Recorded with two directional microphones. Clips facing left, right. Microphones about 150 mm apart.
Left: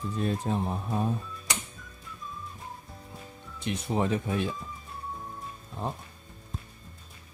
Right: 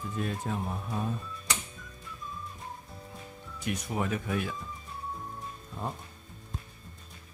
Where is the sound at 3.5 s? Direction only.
30° left (ahead or behind).